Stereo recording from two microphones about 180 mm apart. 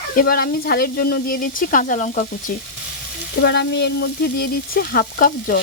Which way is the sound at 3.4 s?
70° left (ahead or behind).